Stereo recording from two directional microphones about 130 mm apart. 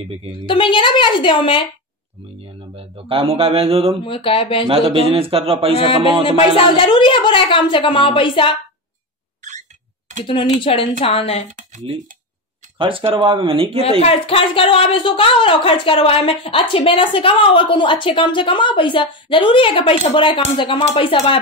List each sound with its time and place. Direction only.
0.5 s a woman's voice: 40° left (ahead or behind)
2.7 s speech: 45° right (ahead or behind)
4.0 s speech: 40° left (ahead or behind)
4.6 s speech: 45° right (ahead or behind)
6.2 s a woman's voice: 45° left (ahead or behind)
9.4 s a sound: 65° right (ahead or behind)
10.2 s a woman's voice: 40° left (ahead or behind)
11.9 s speech: 45° right (ahead or behind)
13.8 s a woman's voice: 50° left (ahead or behind)